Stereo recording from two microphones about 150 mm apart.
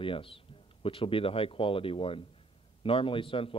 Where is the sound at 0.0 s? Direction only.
35° left (ahead or behind).